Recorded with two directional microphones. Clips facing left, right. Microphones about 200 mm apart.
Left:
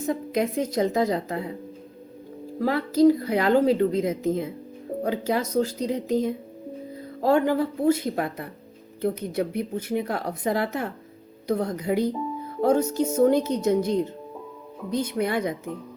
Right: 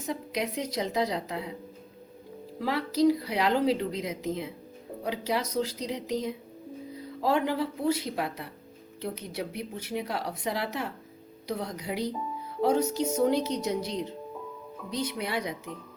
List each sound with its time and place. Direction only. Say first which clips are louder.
0.0 s speech: left 7 dB; 50° left (ahead or behind)
2.6 s speech: left 6 dB; 50° left (ahead or behind)